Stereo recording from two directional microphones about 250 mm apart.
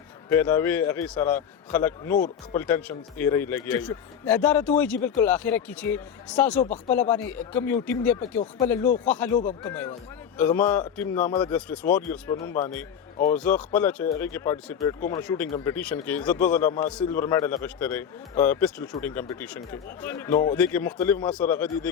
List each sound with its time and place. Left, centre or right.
0.3 s a man's voice: centre
2.1 s speech: left
2.6 s a man's voice: centre
13.7 s a man's voice: centre